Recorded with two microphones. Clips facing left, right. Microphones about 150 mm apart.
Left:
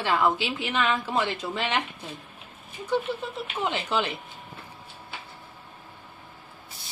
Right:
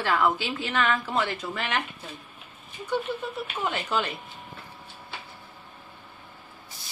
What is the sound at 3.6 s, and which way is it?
Speech, 25° left (ahead or behind).